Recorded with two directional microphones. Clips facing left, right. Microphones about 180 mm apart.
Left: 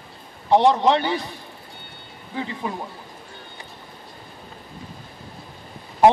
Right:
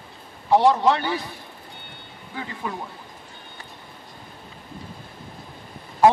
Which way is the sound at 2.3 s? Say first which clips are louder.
Left 3 dB; 25° left (ahead or behind).